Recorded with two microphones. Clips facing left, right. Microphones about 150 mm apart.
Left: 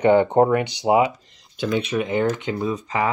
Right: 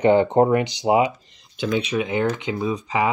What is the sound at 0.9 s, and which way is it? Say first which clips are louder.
Speech: left 1 dB; 5° right (ahead or behind).